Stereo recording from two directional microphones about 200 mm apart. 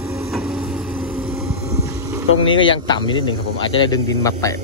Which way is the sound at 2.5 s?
25° left (ahead or behind).